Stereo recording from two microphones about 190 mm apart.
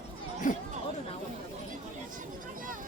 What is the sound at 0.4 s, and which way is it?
Speech, 45° left (ahead or behind).